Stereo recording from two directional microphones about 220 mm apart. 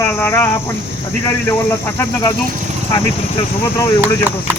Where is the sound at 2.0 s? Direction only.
10° left (ahead or behind).